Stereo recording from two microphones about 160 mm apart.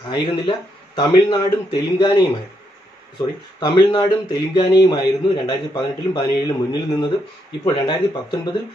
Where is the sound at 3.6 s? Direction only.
25° left (ahead or behind).